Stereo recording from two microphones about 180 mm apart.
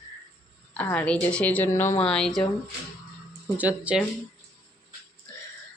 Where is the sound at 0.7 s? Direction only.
10° left (ahead or behind).